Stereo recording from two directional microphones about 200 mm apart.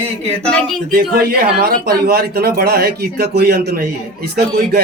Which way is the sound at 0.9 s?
50° right (ahead or behind).